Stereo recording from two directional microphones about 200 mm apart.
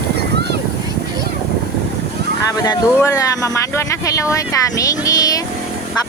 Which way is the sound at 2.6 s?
15° left (ahead or behind).